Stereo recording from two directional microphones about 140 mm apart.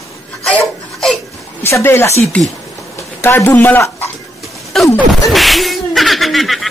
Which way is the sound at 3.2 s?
15° left (ahead or behind).